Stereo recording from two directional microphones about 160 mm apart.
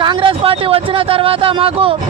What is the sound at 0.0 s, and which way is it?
Speech, 30° right (ahead or behind).